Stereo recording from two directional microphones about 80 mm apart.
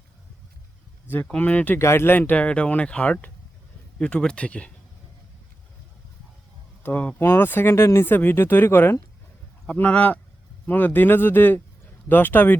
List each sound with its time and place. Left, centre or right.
1.4 s speech: centre
1.8 s speech: left; by 4.7 s centre
6.8 s speech: centre
7.2 s speech: left
9.6 s speech: centre